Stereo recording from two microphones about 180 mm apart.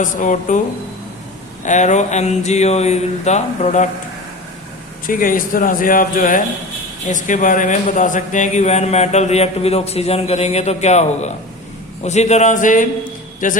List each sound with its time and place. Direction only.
0.0 s speech: 45° left (ahead or behind)
1.6 s a man's voice: 40° left (ahead or behind)
5.0 s a man's voice: 50° left (ahead or behind)